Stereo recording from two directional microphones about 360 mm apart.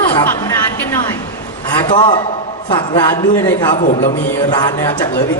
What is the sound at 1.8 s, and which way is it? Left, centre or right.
A man's voice, centre.